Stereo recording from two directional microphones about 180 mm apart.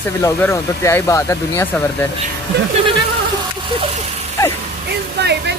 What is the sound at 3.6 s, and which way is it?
Vehicle, 30° right (ahead or behind).